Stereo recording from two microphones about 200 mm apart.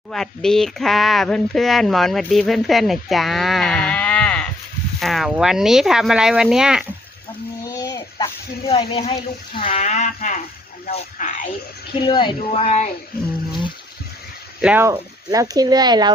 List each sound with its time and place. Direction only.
0.1 s speech: centre (ahead or behind)
7.6 s a sound: 15° left (ahead or behind)
8.7 s speech: 30° left (ahead or behind)
11.9 s speech: 25° left (ahead or behind)
14.6 s speech: 10° right (ahead or behind)